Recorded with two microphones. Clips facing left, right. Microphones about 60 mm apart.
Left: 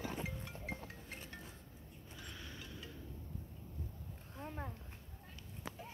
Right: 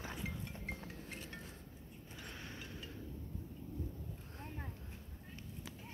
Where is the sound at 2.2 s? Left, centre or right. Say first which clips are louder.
Right 2 dB; right.